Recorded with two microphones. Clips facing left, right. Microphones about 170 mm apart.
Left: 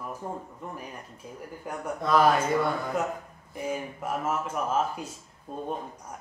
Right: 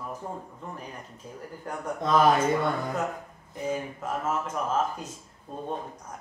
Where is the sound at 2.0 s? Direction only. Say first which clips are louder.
Even; 20° right (ahead or behind).